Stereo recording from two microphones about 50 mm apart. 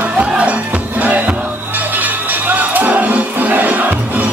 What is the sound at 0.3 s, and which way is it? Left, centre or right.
Music, right.